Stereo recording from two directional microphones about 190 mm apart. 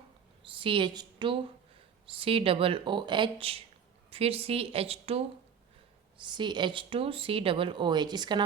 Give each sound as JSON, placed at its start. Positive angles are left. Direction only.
{"t": 0.4, "sound": "a woman's voice", "side_deg": -25}